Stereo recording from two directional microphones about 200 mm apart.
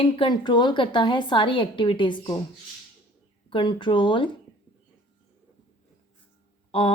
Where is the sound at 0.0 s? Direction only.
25° left (ahead or behind).